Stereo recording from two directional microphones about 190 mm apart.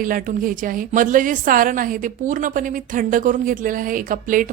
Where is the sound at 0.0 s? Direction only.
45° right (ahead or behind).